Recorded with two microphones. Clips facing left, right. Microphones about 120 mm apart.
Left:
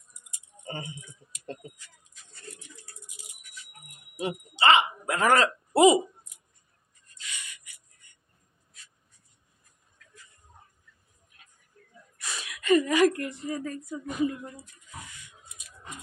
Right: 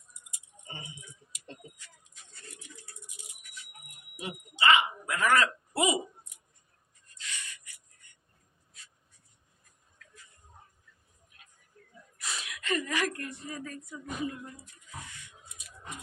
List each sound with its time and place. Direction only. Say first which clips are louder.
0.7 s speech: left 8 dB; 50° left (ahead or behind)
3.2 s a sound: left 1 dB; 35° left (ahead or behind)
4.2 s speech: left 5 dB; 30° left (ahead or behind)
7.2 s a sound: even; 10° left (ahead or behind)
12.2 s gasp: left 1 dB; centre (ahead or behind); by 13.3 s 15° left (ahead or behind)
13.3 s speech: left 7 dB; 30° left (ahead or behind)